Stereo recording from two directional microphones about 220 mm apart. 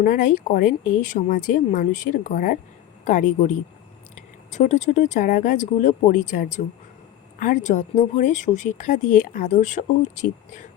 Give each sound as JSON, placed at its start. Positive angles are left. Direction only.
{"t": 0.0, "sound": "speech", "side_deg": 40}
{"t": 4.5, "sound": "speech", "side_deg": 35}